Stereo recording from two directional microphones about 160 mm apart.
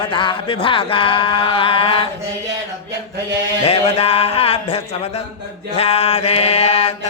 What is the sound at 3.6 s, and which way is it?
Mantra, 40° left (ahead or behind).